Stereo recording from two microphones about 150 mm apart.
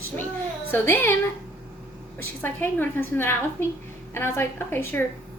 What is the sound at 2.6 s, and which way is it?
A woman's voice, 15° left (ahead or behind).